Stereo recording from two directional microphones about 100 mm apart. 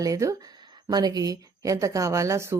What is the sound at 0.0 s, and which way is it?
A woman's voice, 35° right (ahead or behind).